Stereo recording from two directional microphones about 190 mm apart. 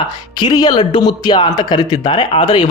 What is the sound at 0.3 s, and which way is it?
A man's voice, 20° left (ahead or behind).